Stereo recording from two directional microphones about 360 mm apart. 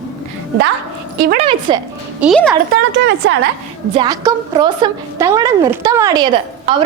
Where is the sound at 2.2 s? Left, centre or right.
Centre.